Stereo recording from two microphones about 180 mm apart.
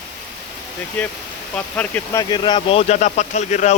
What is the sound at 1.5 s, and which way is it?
A man's voice, 10° left (ahead or behind).